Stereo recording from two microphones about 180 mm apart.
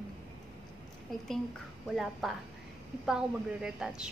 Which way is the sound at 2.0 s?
Centre (ahead or behind).